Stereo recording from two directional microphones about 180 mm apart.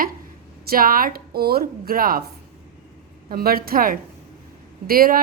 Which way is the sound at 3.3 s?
55° right (ahead or behind).